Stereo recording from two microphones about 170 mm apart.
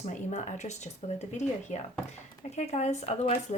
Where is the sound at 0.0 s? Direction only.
45° left (ahead or behind).